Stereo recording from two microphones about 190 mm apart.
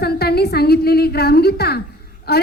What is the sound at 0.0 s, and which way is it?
A woman's voice, 55° left (ahead or behind).